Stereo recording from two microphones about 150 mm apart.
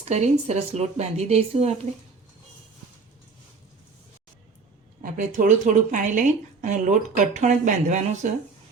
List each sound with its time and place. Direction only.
0.0 s speech: 50° right (ahead or behind)
5.0 s speech: 65° right (ahead or behind)